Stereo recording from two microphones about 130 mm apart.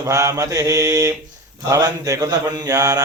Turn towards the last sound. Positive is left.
turn(degrees=-30)  # may be behind; listen again after turning